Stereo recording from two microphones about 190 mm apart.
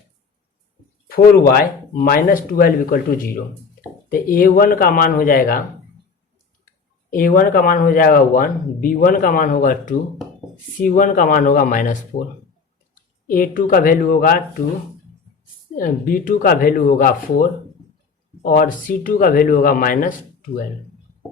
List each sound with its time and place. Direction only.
1.0 s speech: 50° left (ahead or behind)
7.1 s speech: 45° left (ahead or behind)
15.8 s speech: 45° left (ahead or behind)